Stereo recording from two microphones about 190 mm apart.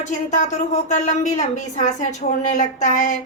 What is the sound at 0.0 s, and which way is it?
A woman's voice, 40° left (ahead or behind).